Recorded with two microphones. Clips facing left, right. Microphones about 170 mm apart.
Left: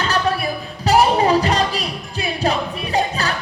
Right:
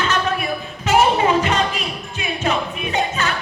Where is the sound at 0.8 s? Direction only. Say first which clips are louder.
Left 1 dB; 35° left (ahead or behind).